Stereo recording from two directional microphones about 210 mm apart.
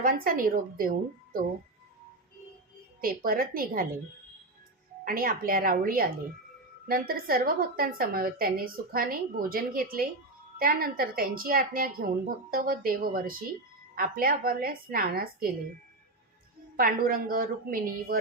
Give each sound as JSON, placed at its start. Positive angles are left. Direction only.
{"t": 0.0, "sound": "a woman's voice", "side_deg": -40}
{"t": 3.0, "sound": "a woman's voice", "side_deg": -45}
{"t": 5.0, "sound": "a woman's voice", "side_deg": -45}
{"t": 16.7, "sound": "a woman's voice", "side_deg": -45}